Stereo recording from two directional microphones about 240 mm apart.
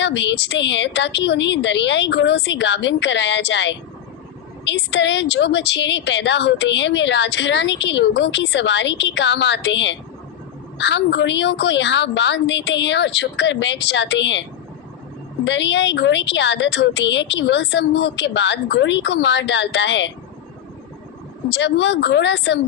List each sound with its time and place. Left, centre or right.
0.0 s a woman's voice: left
15.4 s a woman's voice: left
21.5 s a woman's voice: left